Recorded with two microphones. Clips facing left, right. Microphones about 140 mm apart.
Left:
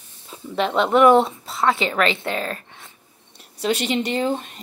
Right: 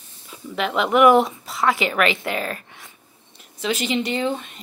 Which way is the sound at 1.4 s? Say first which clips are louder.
Even; centre (ahead or behind).